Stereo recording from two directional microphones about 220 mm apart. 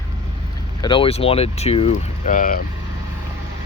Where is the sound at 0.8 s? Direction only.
20° left (ahead or behind).